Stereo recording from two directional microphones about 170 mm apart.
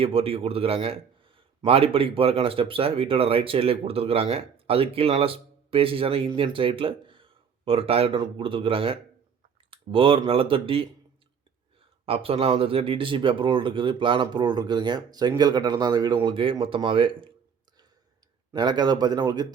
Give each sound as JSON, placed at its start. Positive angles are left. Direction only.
{"t": 0.0, "sound": "speech", "side_deg": -35}
{"t": 12.0, "sound": "speech", "side_deg": -35}
{"t": 18.5, "sound": "speech", "side_deg": -25}